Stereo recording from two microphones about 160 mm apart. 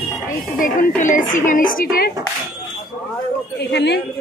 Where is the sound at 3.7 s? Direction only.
90° left.